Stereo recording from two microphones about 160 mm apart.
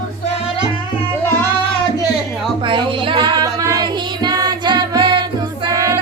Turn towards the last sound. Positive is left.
turn(degrees=-20)  # may be behind; listen again after turning